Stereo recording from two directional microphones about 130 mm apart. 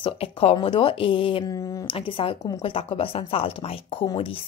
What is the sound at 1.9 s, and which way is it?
A woman's voice, 40° left (ahead or behind).